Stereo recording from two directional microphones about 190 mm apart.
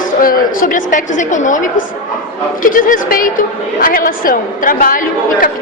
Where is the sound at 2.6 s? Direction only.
45° left (ahead or behind).